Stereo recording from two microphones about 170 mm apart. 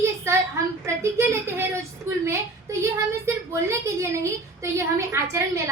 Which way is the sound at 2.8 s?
15° right (ahead or behind).